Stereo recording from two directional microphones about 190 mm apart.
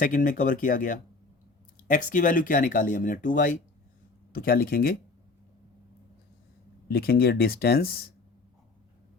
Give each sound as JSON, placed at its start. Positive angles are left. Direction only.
{"t": 0.0, "sound": "speech", "side_deg": 45}
{"t": 6.8, "sound": "speech", "side_deg": 55}